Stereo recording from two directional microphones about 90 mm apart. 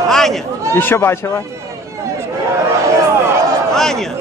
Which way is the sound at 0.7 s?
25° left (ahead or behind).